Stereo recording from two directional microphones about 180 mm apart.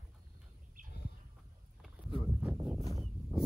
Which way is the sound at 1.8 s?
10° right (ahead or behind).